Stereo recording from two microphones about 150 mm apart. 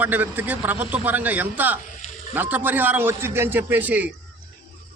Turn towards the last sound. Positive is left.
turn(degrees=-10)  # may be behind; listen again after turning